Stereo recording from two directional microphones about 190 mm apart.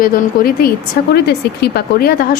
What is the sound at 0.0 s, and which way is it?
Speech, 50° left (ahead or behind).